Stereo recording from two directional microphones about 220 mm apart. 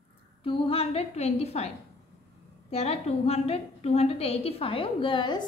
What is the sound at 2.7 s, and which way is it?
A woman's voice, 30° left (ahead or behind).